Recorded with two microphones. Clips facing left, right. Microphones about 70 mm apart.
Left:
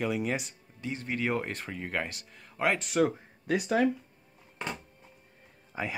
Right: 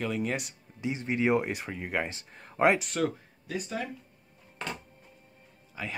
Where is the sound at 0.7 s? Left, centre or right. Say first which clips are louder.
Right 4 dB; centre.